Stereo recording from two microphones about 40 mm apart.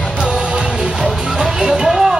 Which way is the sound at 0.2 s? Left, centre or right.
Right.